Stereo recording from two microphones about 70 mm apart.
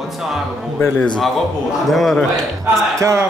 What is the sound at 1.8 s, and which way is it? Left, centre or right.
Speech, centre.